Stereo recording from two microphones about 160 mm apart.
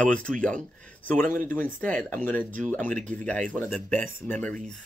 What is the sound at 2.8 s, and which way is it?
Speech, 55° right (ahead or behind).